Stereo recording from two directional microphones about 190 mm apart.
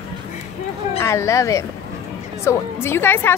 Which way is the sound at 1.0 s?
15° left (ahead or behind).